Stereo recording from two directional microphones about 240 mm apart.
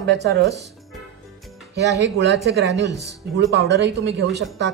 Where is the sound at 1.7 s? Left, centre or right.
Right.